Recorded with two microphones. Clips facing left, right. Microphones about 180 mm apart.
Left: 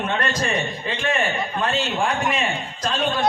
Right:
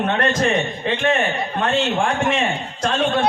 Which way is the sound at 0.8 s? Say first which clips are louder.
Right 6 dB; 60° right (ahead or behind).